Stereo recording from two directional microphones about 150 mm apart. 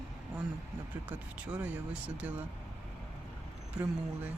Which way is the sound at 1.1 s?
10° right (ahead or behind).